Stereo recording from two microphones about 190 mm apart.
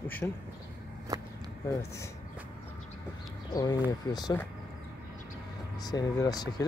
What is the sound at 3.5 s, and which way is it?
Speech, 20° left (ahead or behind).